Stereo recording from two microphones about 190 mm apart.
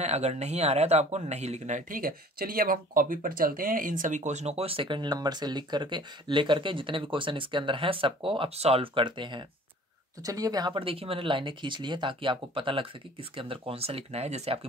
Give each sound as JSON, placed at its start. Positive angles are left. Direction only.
{"t": 0.0, "sound": "speech", "side_deg": -35}